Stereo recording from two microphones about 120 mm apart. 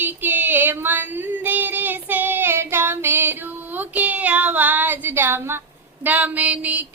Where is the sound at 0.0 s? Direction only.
15° right (ahead or behind).